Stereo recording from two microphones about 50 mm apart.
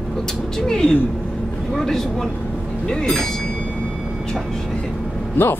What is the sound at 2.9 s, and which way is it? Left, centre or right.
Speech, centre.